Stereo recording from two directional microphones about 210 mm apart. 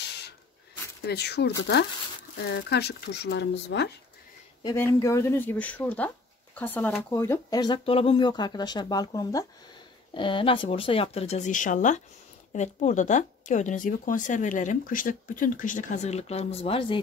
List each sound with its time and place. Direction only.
0.0 s a sound: 50° left (ahead or behind)
1.0 s speech: 50° left (ahead or behind)
2.5 s speech: 50° left (ahead or behind)
4.6 s speech: 15° left (ahead or behind)